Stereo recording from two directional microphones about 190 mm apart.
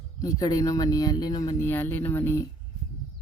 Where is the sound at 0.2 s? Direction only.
20° left (ahead or behind).